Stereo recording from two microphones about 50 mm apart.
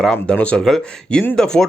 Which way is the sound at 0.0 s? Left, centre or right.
Centre.